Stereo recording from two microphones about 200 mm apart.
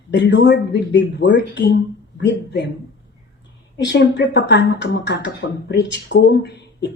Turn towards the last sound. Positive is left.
turn(degrees=55)  # may be behind; listen again after turning